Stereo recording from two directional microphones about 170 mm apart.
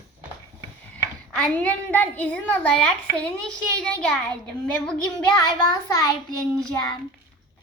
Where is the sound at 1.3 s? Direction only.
5° left (ahead or behind).